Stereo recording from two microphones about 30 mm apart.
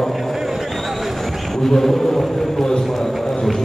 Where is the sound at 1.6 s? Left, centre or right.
Centre.